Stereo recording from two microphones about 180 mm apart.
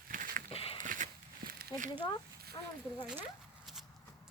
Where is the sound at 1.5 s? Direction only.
60° right (ahead or behind).